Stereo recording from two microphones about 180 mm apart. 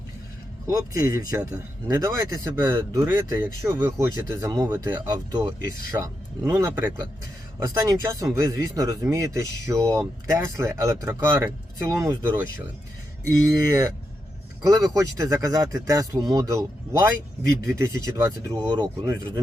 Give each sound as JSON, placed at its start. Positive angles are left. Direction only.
{"t": 0.7, "sound": "speech", "side_deg": -20}
{"t": 5.0, "sound": "speech", "side_deg": -25}
{"t": 13.5, "sound": "speech", "side_deg": -20}